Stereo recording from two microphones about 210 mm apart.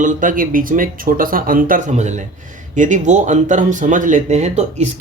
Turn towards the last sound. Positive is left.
turn(degrees=-35)  # may be behind; listen again after turning